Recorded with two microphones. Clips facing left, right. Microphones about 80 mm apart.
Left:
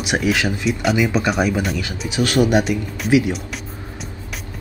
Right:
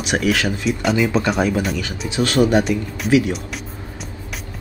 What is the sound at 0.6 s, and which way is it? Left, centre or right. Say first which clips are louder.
Speech: left 1 dB; centre.